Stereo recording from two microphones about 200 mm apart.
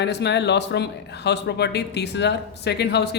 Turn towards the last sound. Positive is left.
turn(degrees=55)  # may be behind; listen again after turning